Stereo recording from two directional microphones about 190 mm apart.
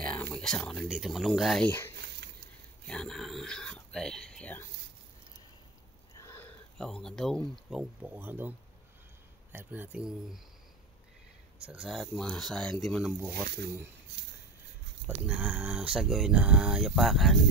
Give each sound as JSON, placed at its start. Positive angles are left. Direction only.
{"t": 0.0, "sound": "speech", "side_deg": 5}
{"t": 6.1, "sound": "sniff", "side_deg": 15}
{"t": 6.8, "sound": "speech", "side_deg": 5}
{"t": 7.7, "sound": "speech", "side_deg": -10}
{"t": 11.6, "sound": "speech", "side_deg": -5}
{"t": 13.3, "sound": "speech", "side_deg": -60}
{"t": 15.0, "sound": "speech", "side_deg": -5}